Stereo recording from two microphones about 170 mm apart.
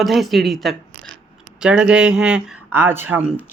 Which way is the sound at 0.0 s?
Centre (ahead or behind).